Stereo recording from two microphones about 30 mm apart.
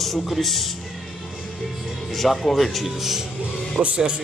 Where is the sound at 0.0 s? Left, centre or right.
Centre.